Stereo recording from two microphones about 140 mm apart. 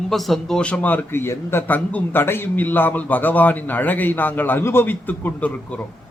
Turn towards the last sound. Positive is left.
turn(degrees=10)  # may be behind; listen again after turning